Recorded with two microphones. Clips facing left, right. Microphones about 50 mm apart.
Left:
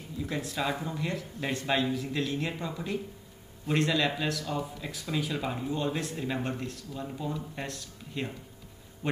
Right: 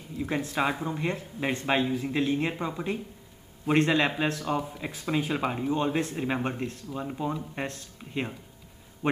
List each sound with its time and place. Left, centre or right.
0.2 s speech: right